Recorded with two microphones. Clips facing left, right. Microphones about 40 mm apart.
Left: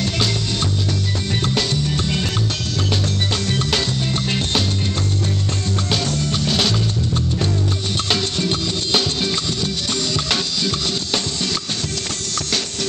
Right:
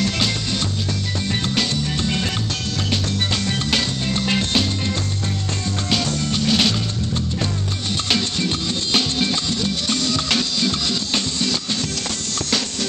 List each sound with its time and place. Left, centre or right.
5.9 s music: right